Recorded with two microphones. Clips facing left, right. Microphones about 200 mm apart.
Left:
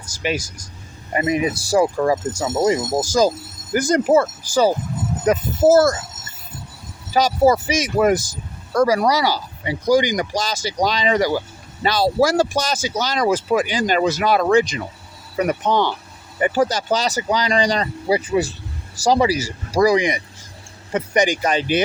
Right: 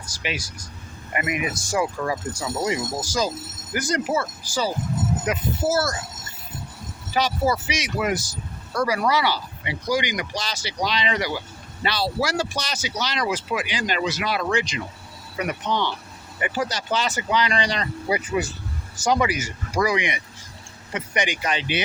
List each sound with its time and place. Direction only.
0.1 s speech: 45° left (ahead or behind)
1.1 s speech: 35° left (ahead or behind); by 5.9 s 50° left (ahead or behind)
7.1 s speech: 45° left (ahead or behind)